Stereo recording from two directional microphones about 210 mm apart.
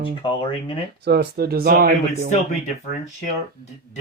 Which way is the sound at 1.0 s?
50° right (ahead or behind).